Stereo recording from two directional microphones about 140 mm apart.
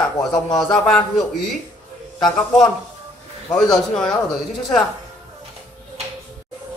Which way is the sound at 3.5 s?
5° left (ahead or behind).